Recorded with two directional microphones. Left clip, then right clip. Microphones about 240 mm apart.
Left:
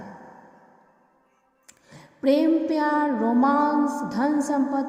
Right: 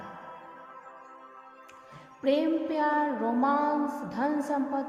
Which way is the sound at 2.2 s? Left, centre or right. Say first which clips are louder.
Left 6 dB; left.